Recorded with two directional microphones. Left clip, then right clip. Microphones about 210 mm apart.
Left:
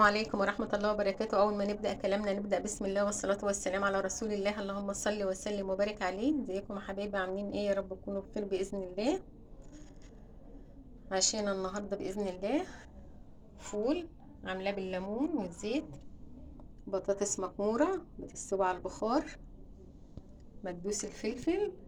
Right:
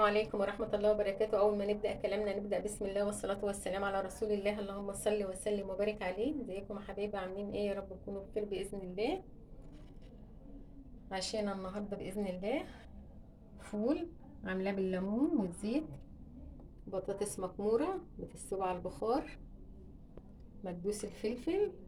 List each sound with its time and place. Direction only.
0.3 s a woman's voice: 20° left (ahead or behind)
11.1 s speech: 15° left (ahead or behind)
13.6 s speech: 20° left (ahead or behind)
16.9 s a woman's voice: 15° left (ahead or behind)
20.9 s a woman's voice: 10° left (ahead or behind)